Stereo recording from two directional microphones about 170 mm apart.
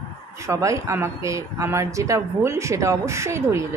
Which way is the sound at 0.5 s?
20° right (ahead or behind).